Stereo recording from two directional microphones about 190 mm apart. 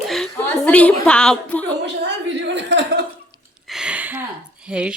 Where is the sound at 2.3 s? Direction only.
70° right (ahead or behind).